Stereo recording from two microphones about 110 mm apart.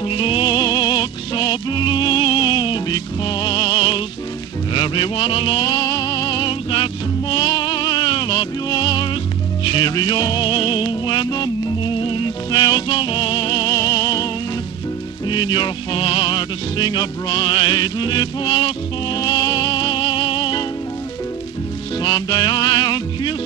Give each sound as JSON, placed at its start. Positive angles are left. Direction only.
{"t": 0.0, "sound": "music", "side_deg": 55}
{"t": 19.2, "sound": "music", "side_deg": 35}
{"t": 22.0, "sound": "music", "side_deg": 40}